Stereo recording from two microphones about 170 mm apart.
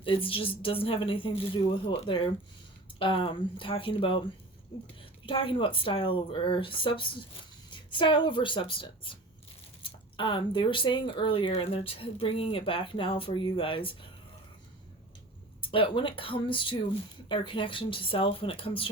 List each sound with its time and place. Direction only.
0.0 s speech: 30° left (ahead or behind)
5.2 s speech: 30° left (ahead or behind)
15.7 s speech: 30° left (ahead or behind)